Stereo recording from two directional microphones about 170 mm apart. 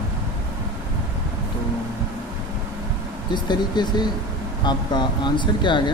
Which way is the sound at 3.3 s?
25° left (ahead or behind).